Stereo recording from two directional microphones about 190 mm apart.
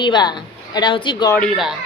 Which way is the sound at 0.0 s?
25° left (ahead or behind).